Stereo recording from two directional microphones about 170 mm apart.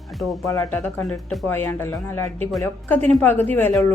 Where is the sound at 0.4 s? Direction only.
20° left (ahead or behind).